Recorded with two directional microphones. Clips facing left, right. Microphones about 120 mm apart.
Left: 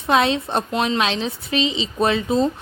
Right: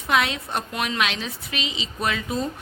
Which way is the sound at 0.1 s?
30° left (ahead or behind).